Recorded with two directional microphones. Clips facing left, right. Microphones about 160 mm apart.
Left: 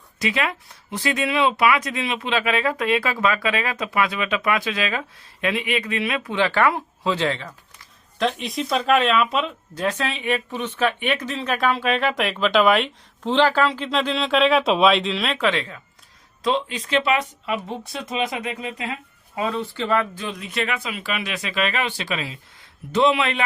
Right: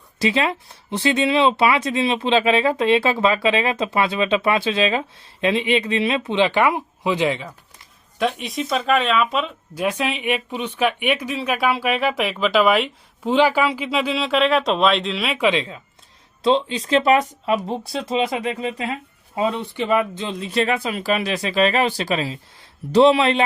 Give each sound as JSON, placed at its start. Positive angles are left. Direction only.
{"t": 0.2, "sound": "speech", "side_deg": -30}
{"t": 8.2, "sound": "speech", "side_deg": -5}
{"t": 9.8, "sound": "speech", "side_deg": -10}
{"t": 15.4, "sound": "speech", "side_deg": -15}
{"t": 17.0, "sound": "speech", "side_deg": -40}
{"t": 19.4, "sound": "speech", "side_deg": -15}